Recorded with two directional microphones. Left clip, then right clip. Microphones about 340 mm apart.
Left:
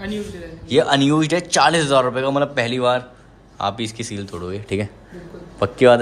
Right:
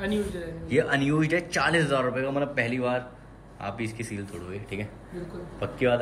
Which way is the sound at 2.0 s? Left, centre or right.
Left.